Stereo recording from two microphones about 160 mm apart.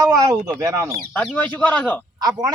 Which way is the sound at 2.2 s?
25° right (ahead or behind).